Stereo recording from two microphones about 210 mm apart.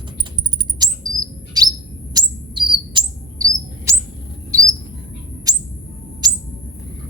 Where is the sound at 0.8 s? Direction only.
20° right (ahead or behind).